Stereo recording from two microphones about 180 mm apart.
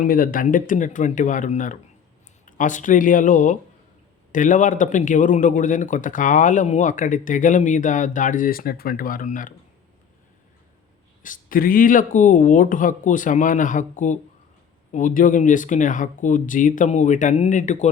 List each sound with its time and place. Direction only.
0.0 s a man's voice: 50° left (ahead or behind)
11.2 s a man's voice: 50° left (ahead or behind)